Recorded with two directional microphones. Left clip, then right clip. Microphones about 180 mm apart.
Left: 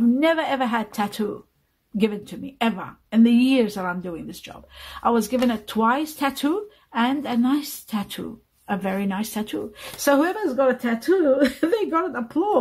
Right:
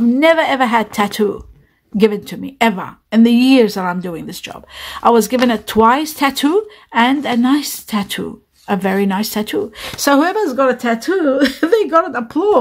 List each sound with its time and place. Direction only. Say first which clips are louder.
0.2 s a woman's voice: right 13 dB; 30° right (ahead or behind)